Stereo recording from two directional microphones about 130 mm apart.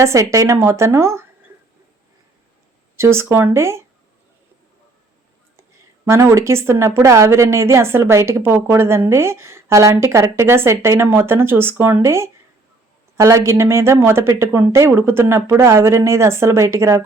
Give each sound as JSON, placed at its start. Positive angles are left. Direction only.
{"t": 0.0, "sound": "a woman's voice", "side_deg": -25}
{"t": 2.9, "sound": "a woman's voice", "side_deg": -20}
{"t": 6.1, "sound": "a woman's voice", "side_deg": -20}